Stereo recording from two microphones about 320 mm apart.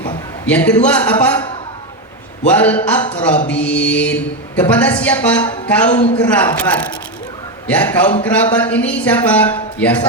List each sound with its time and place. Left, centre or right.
0.0 s a man's voice: centre
2.5 s a woman's voice: centre